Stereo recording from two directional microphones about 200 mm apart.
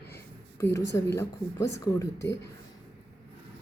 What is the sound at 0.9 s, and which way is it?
Speech, 15° left (ahead or behind).